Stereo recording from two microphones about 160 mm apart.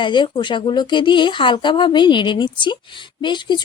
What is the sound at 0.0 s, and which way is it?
Speech, 30° left (ahead or behind).